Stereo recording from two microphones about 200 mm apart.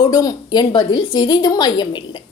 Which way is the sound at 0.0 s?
20° left (ahead or behind).